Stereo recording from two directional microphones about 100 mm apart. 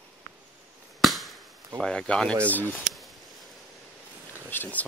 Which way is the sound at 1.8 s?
10° left (ahead or behind).